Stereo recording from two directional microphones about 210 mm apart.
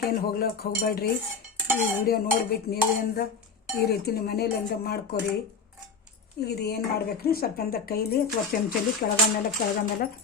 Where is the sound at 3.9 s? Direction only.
50° left (ahead or behind).